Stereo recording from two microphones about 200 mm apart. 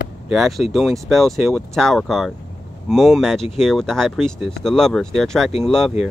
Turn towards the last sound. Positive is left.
turn(degrees=0)  # may be behind; listen again after turning